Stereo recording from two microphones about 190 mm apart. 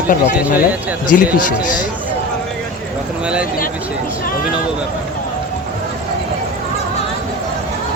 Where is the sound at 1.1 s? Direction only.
45° left (ahead or behind).